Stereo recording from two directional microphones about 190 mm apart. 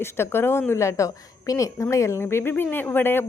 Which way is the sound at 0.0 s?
10° left (ahead or behind).